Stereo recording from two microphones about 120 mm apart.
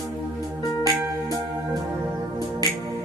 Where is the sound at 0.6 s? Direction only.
30° left (ahead or behind).